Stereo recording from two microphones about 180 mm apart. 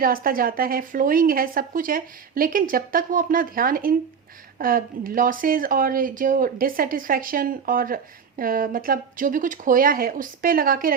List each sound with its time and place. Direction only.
0.0 s speech: 55° right (ahead or behind)